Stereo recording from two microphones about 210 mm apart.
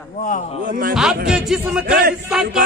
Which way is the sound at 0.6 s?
40° right (ahead or behind).